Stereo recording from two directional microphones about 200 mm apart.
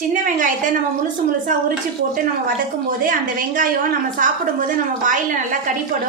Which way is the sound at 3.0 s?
45° right (ahead or behind).